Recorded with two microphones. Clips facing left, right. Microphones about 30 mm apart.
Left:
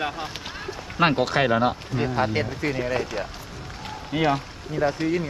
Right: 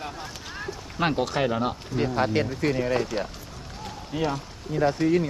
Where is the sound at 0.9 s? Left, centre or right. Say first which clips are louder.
Left 4 dB; left.